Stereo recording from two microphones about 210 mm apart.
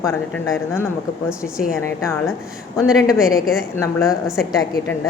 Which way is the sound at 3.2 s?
Centre (ahead or behind).